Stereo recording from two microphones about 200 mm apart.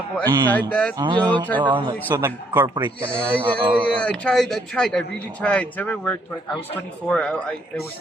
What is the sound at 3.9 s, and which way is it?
A man's voice, 5° left (ahead or behind).